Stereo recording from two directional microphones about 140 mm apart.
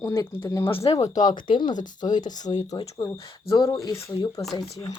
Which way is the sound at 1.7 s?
65° left (ahead or behind).